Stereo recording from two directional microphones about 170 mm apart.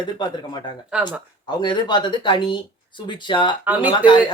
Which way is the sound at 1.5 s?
25° left (ahead or behind).